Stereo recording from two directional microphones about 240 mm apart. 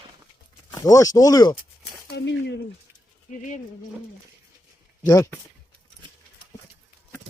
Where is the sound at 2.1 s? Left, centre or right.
Left.